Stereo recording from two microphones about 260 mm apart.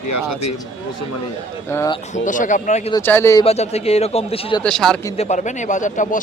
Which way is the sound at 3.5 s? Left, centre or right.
Left.